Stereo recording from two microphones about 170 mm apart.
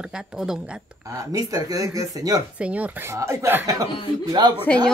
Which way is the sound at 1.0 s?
20° right (ahead or behind).